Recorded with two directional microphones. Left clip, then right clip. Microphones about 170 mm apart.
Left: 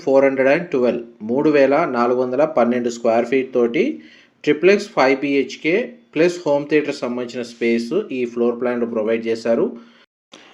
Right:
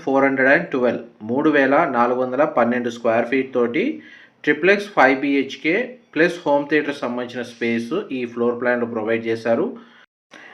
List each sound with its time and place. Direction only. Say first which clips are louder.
0.0 s speech: left 2 dB; 40° left (ahead or behind)